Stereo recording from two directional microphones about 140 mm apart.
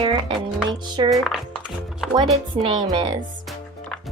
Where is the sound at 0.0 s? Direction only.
35° right (ahead or behind).